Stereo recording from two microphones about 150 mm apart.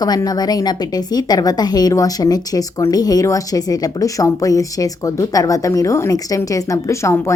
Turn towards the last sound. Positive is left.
turn(degrees=20)  # may be behind; listen again after turning